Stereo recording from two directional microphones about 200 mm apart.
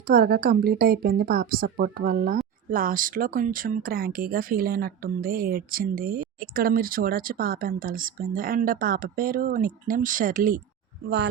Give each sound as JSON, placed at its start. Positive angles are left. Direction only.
{"t": 0.1, "sound": "speech", "side_deg": -50}